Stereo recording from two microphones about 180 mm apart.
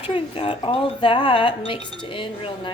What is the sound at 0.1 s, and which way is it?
Speech, 30° left (ahead or behind).